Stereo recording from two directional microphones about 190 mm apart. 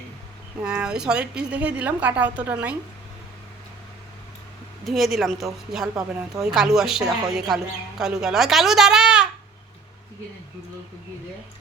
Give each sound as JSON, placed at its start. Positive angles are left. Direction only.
{"t": 0.6, "sound": "a woman's voice", "side_deg": -5}
{"t": 4.9, "sound": "a woman's voice", "side_deg": 0}